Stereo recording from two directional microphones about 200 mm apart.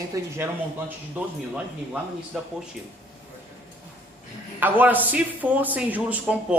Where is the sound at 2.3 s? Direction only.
Centre (ahead or behind).